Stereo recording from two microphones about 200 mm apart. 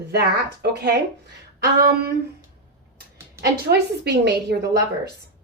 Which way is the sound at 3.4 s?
55° right (ahead or behind).